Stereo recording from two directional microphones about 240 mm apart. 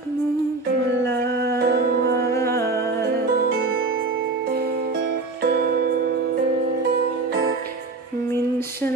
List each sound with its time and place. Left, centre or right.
1.2 s music: right